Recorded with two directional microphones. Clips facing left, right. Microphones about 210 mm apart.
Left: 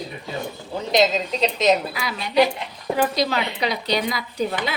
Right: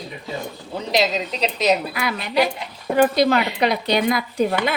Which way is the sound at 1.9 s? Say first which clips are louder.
Right 2 dB; 55° right (ahead or behind).